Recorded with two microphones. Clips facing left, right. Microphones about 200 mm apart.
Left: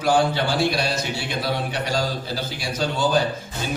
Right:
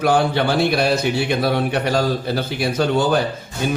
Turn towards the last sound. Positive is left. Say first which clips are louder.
# right 5 dB
turn(degrees=-60)  # may be behind; listen again after turning